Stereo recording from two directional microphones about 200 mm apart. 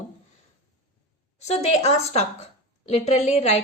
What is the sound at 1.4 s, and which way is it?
A woman's voice, 30° left (ahead or behind).